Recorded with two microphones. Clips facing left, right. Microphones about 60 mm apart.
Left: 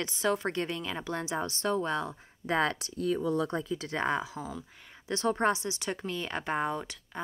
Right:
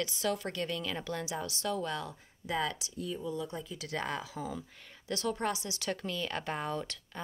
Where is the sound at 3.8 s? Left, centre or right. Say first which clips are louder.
Left 3 dB; left.